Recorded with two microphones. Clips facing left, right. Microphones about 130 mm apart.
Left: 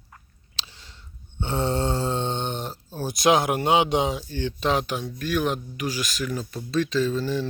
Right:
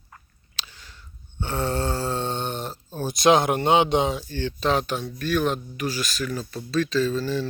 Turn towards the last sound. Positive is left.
turn(degrees=15)  # may be behind; listen again after turning